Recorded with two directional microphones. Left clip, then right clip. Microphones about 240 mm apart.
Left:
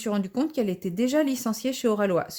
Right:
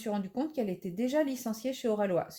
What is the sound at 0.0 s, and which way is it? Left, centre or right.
Speech, left.